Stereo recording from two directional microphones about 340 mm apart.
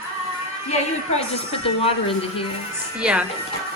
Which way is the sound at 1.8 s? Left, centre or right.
Centre.